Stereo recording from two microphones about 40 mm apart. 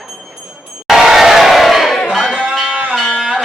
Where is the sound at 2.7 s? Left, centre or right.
Right.